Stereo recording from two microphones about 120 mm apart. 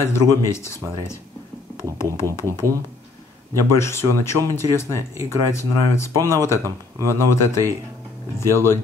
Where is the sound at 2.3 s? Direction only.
20° left (ahead or behind).